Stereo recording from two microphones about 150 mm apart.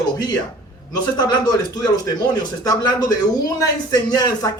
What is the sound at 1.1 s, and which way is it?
Speech, 25° left (ahead or behind).